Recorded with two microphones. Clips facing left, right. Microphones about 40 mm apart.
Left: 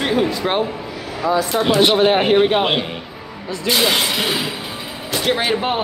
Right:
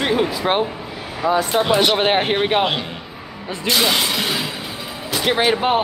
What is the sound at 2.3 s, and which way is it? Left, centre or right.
Speech, centre.